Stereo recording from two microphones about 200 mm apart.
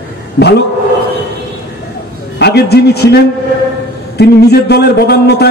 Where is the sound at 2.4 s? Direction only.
55° left (ahead or behind).